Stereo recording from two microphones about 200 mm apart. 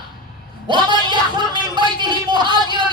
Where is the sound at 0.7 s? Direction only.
20° right (ahead or behind).